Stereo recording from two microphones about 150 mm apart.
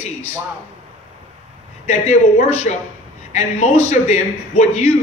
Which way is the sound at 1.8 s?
50° left (ahead or behind).